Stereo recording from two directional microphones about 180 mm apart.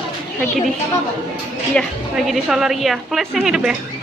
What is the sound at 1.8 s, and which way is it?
A woman's voice, centre (ahead or behind).